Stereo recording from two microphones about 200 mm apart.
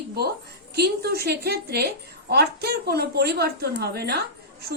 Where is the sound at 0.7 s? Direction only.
55° right (ahead or behind).